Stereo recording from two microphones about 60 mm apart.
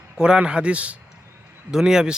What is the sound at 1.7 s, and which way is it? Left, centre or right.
Speech, centre.